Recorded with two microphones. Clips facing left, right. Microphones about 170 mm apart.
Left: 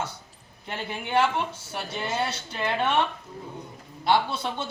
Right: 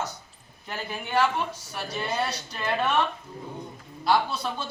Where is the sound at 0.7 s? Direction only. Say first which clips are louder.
Left 2 dB; 25° left (ahead or behind).